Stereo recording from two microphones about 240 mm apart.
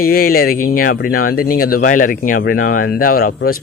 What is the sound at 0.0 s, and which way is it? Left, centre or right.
Speech, left.